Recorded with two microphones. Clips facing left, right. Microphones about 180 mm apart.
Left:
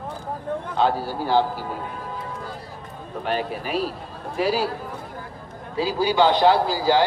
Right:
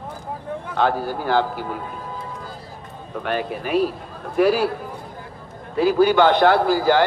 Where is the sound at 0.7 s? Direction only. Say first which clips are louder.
Right 2 dB; 55° right (ahead or behind).